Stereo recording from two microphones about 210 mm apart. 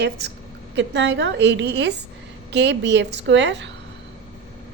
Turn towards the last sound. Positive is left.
turn(degrees=-55)  # may be behind; listen again after turning